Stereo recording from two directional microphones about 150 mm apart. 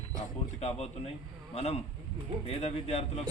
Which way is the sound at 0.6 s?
45° left (ahead or behind).